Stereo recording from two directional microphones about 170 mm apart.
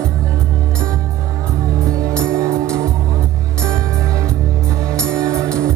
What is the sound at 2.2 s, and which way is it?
Music, 15° right (ahead or behind).